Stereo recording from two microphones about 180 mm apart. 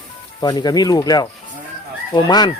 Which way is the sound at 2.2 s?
25° left (ahead or behind).